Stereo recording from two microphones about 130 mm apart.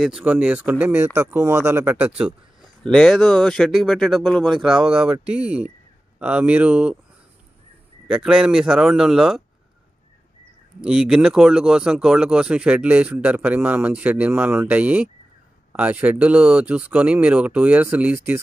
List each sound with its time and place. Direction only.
0.0 s speech: 10° right (ahead or behind)
2.0 s speech: 10° right (ahead or behind)
2.8 s speech: 5° left (ahead or behind)
8.1 s speech: 5° right (ahead or behind)
10.8 s speech: 5° right (ahead or behind)